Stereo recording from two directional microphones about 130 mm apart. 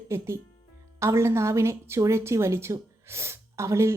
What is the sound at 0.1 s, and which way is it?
A woman's voice, 20° right (ahead or behind).